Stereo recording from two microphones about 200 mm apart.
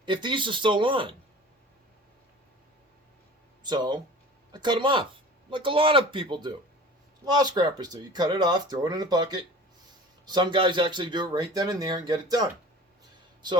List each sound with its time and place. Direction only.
0.0 s speech: 25° right (ahead or behind)
3.6 s speech: 20° right (ahead or behind)